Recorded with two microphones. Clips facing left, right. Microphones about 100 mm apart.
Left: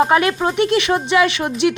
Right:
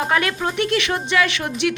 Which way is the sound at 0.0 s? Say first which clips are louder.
Left 6 dB; 20° left (ahead or behind).